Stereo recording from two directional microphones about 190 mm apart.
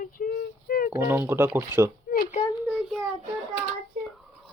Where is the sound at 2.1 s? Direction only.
50° left (ahead or behind).